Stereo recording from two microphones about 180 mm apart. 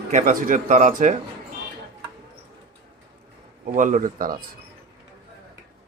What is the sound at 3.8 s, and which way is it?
Speech, 45° right (ahead or behind).